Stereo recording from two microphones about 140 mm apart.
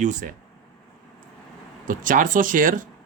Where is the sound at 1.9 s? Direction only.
75° right (ahead or behind).